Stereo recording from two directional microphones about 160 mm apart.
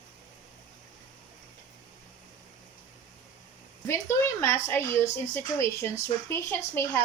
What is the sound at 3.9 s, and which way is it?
Speech, 15° left (ahead or behind).